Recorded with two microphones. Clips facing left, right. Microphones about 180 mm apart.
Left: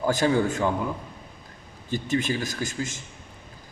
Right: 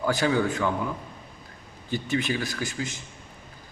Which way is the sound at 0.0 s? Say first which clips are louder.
Left 2 dB; 40° left (ahead or behind).